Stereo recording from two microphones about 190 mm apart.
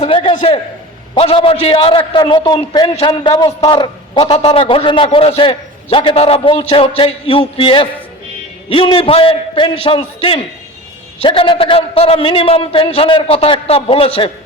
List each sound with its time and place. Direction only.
0.0 s a man's voice: 30° left (ahead or behind)